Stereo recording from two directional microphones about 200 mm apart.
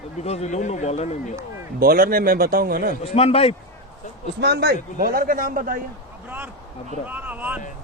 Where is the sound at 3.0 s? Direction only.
30° left (ahead or behind).